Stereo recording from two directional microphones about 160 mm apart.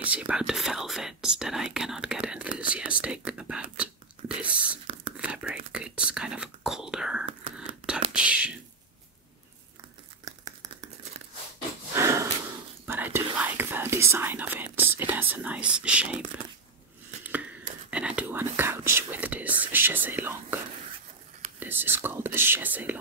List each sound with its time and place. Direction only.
0.0 s speech: 10° right (ahead or behind)
7.5 s whispering: 5° right (ahead or behind)
10.2 s a sound: 20° right (ahead or behind)
11.9 s snort: 20° right (ahead or behind)
12.8 s speech: 15° right (ahead or behind)
17.2 s a sound: 10° right (ahead or behind)
17.9 s speech: 10° right (ahead or behind)